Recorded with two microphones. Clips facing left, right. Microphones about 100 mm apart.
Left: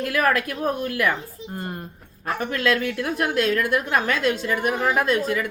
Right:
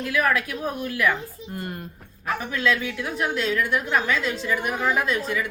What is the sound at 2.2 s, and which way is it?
A woman's voice, 50° left (ahead or behind).